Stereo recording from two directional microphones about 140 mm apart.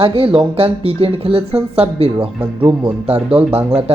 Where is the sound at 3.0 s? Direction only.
45° right (ahead or behind).